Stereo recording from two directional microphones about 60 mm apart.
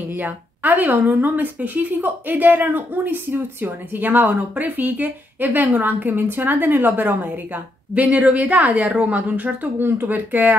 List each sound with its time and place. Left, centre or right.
0.1 s a woman's voice: right